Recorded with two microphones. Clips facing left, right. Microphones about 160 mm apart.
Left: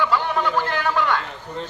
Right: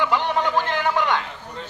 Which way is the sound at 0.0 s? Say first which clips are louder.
Even; 20° right (ahead or behind).